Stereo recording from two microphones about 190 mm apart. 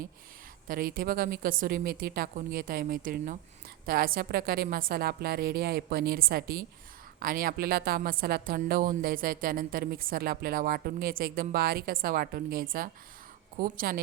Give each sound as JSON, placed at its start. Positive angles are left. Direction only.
{"t": 0.7, "sound": "a woman's voice", "side_deg": -50}